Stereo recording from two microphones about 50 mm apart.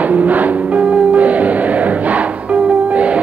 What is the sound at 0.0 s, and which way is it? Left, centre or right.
Music, right.